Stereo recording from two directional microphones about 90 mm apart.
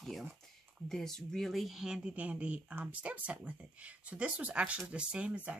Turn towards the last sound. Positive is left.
turn(degrees=-10)  # may be behind; listen again after turning